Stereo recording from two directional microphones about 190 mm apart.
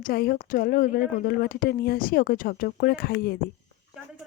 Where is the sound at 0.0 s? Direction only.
50° left (ahead or behind).